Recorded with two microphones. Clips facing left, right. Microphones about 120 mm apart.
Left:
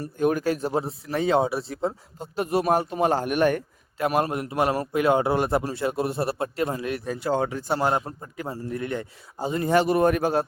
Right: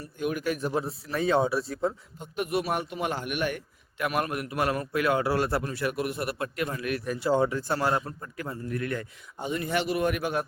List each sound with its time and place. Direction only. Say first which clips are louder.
0.0 s a man's voice: left 7 dB; 40° left (ahead or behind)
4.0 s a man's voice: left 5 dB; 25° left (ahead or behind)